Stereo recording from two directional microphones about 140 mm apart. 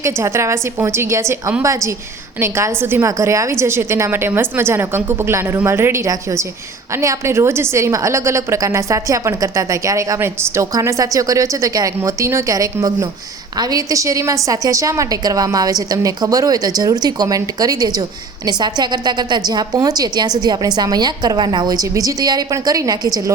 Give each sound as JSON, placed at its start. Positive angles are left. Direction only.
{"t": 0.0, "sound": "a woman's voice", "side_deg": -20}